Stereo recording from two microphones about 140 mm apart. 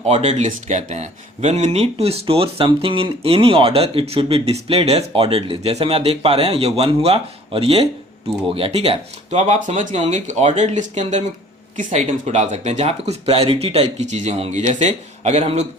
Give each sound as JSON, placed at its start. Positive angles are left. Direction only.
{"t": 0.1, "sound": "speech", "side_deg": -50}